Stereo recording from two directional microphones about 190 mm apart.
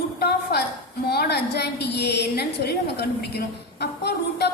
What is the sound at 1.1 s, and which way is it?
A woman's voice, 60° left (ahead or behind).